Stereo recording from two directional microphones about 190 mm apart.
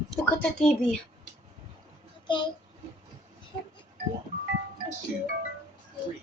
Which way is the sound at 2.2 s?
25° left (ahead or behind).